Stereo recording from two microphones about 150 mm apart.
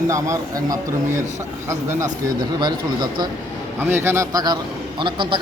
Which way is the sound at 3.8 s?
15° right (ahead or behind).